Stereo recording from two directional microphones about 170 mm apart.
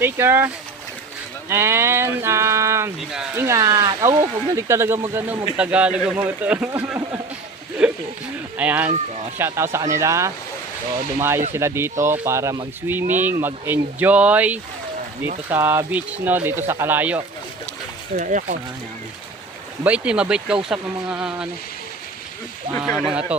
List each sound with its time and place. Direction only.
0.0 s speech: 15° right (ahead or behind)
3.0 s speech: 5° right (ahead or behind)
3.3 s speech: 15° right (ahead or behind)
7.8 s a sound: 5° right (ahead or behind)
8.5 s speech: 10° right (ahead or behind)
11.5 s speech: 15° right (ahead or behind)
18.2 s speech: 45° right (ahead or behind)
19.8 s speech: 5° right (ahead or behind)
22.9 s speech: 5° left (ahead or behind)